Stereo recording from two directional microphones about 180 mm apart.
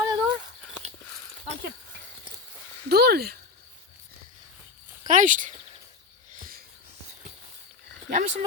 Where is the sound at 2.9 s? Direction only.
60° right (ahead or behind).